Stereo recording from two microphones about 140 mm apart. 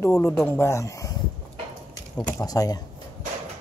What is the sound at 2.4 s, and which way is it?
Speech, 25° left (ahead or behind).